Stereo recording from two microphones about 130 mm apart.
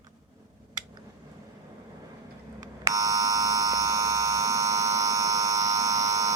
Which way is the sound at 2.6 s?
25° right (ahead or behind).